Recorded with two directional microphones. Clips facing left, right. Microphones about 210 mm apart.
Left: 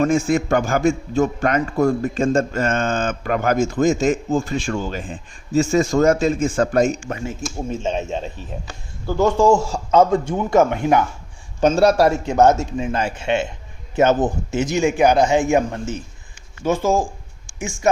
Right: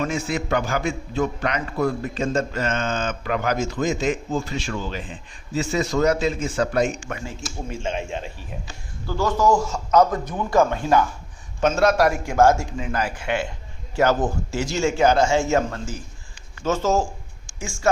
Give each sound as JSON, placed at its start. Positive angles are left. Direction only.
{"t": 0.0, "sound": "a man's voice", "side_deg": 45}
{"t": 9.0, "sound": "a man's voice", "side_deg": 25}
{"t": 11.6, "sound": "a man's voice", "side_deg": 35}
{"t": 16.3, "sound": "a sound", "side_deg": 10}
{"t": 17.6, "sound": "speech", "side_deg": 20}